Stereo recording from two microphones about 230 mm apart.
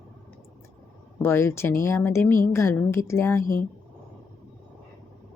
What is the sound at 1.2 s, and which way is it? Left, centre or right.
A woman's voice, centre.